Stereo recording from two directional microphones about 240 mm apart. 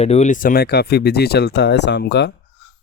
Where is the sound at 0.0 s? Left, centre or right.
Left.